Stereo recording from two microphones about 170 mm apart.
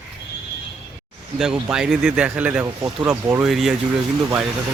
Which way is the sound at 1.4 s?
5° right (ahead or behind).